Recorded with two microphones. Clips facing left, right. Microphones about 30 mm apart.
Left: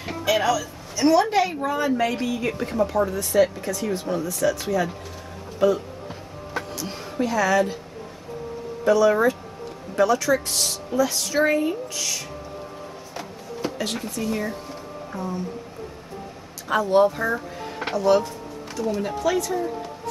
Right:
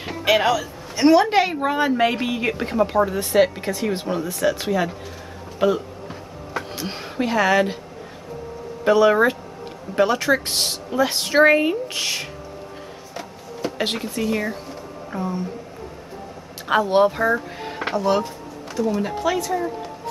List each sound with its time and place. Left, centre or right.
0.2 s a man's voice: right
6.8 s a woman's voice: right
8.8 s speech: right
13.1 s a sound: centre
13.7 s speech: right
14.1 s speech: right
16.6 s speech: right
17.8 s speech: centre
18.8 s speech: centre